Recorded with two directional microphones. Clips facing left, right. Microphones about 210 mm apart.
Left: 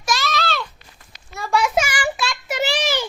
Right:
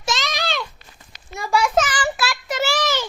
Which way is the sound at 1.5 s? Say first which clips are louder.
Right 1 dB; centre (ahead or behind).